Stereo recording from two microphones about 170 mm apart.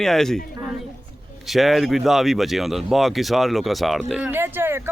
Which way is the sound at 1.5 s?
Centre (ahead or behind).